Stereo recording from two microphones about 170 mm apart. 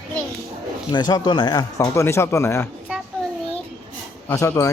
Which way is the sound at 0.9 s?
25° left (ahead or behind).